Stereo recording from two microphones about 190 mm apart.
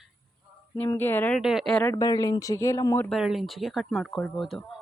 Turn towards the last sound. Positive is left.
turn(degrees=0)  # may be behind; listen again after turning